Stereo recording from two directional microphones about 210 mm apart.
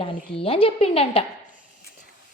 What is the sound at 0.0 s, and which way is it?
A woman's voice, 25° left (ahead or behind).